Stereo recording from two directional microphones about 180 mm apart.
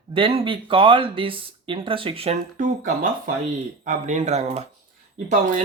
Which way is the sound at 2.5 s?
45° right (ahead or behind).